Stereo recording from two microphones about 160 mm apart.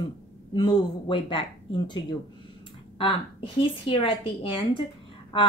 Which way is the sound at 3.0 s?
35° left (ahead or behind).